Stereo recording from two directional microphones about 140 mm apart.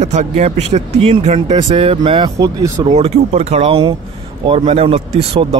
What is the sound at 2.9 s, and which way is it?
Speech, 50° right (ahead or behind).